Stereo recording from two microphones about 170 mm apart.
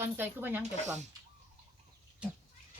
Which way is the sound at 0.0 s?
10° right (ahead or behind).